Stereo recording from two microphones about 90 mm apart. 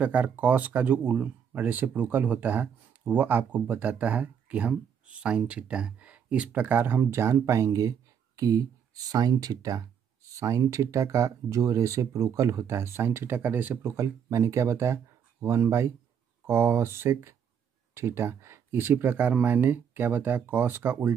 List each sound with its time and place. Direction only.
0.0 s speech: 15° right (ahead or behind)
13.9 s speech: 35° right (ahead or behind)